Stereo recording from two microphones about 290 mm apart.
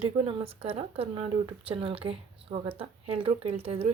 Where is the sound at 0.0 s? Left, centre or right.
Centre.